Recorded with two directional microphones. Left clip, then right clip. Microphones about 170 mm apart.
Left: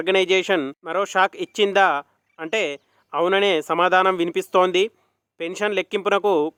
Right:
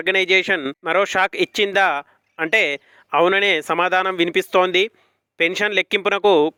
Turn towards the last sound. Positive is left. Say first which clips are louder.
# right 4 dB
turn(degrees=-15)  # may be behind; listen again after turning